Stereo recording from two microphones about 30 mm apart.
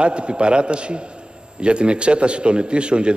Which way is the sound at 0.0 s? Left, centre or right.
Right.